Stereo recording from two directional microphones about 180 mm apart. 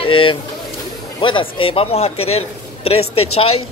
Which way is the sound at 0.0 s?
30° left (ahead or behind).